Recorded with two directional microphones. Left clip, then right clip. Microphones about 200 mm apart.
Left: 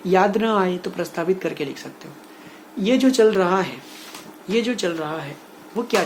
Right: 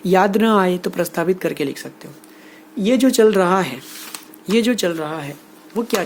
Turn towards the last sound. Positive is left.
turn(degrees=-50)  # may be behind; listen again after turning